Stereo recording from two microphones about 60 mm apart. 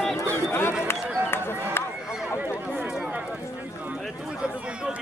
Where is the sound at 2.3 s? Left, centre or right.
Right.